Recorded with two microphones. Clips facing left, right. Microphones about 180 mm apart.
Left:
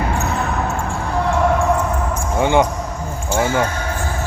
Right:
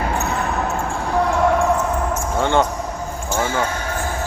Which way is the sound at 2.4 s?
15° left (ahead or behind).